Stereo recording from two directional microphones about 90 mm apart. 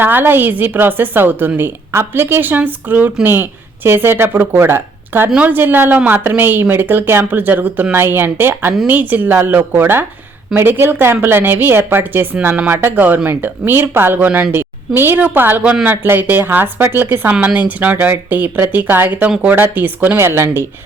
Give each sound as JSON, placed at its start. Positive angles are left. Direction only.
{"t": 0.0, "sound": "a woman's voice", "side_deg": -20}